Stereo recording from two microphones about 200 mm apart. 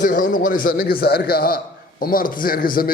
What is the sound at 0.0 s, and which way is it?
A man's voice, 40° left (ahead or behind).